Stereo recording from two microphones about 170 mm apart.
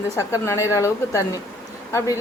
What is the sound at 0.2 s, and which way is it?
A man's voice, 15° left (ahead or behind).